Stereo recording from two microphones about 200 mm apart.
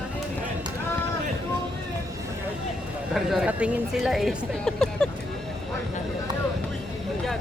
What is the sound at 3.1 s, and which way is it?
Speech, centre (ahead or behind).